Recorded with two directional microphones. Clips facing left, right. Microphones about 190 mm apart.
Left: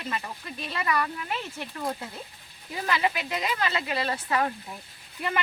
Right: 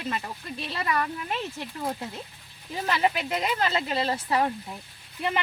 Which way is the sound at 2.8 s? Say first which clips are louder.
Right 2 dB; 35° right (ahead or behind).